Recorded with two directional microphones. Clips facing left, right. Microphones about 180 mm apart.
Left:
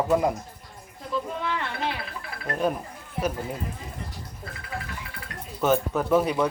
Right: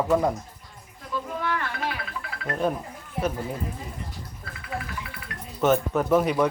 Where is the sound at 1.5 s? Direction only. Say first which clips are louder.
Even; 25° left (ahead or behind).